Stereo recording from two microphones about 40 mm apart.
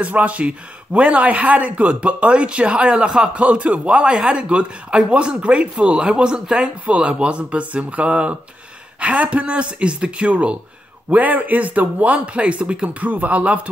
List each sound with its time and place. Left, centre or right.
0.0 s speech: right
11.1 s speech: right
13.0 s speech: right